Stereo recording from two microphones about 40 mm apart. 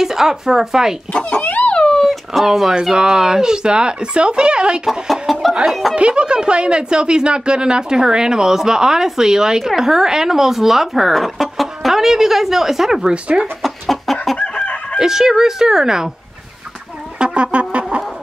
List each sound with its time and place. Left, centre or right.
0.0 s speech: centre
1.6 s a sound: left
2.0 s dog: centre
2.8 s speech: centre
5.0 s chicken: centre
5.9 s speech: right; by 13.1 s centre
13.6 s chicken: centre
14.4 s chicken: left
15.0 s speech: centre
17.2 s music: right